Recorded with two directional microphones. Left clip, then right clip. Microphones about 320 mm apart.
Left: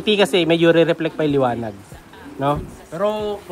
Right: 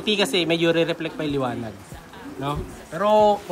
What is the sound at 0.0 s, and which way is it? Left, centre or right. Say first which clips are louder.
Speech: left 5 dB; centre.